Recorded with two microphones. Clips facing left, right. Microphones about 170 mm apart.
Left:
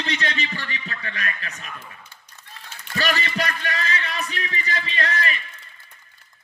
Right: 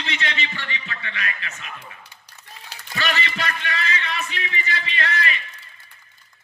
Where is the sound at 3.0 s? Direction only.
40° left (ahead or behind).